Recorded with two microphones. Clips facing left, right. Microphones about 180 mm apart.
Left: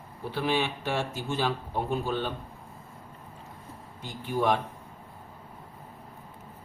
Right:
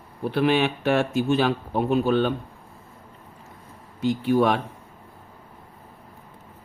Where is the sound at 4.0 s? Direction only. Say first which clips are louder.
Right 9 dB; 80° right.